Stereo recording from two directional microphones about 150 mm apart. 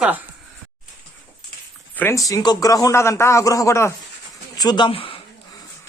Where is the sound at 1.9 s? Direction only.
15° left (ahead or behind); by 5.2 s 35° left (ahead or behind).